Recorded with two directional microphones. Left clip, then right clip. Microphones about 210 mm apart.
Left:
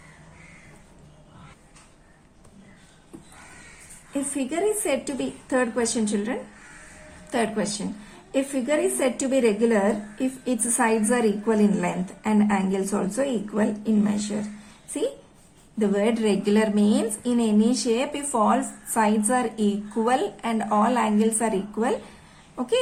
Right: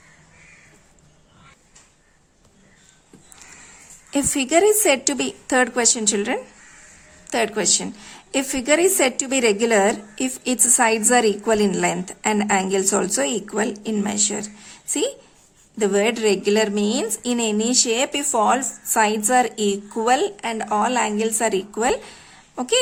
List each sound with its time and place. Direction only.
4.4 s a woman's voice: 45° right (ahead or behind)
7.3 s a woman's voice: 35° right (ahead or behind)
15.8 s a woman's voice: 40° right (ahead or behind)